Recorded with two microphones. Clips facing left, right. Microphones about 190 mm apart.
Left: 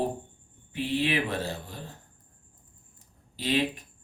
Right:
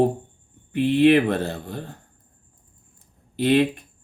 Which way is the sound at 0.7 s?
55° right (ahead or behind).